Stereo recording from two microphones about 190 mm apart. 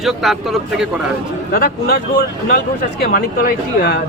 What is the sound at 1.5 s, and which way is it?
Speech, 50° left (ahead or behind).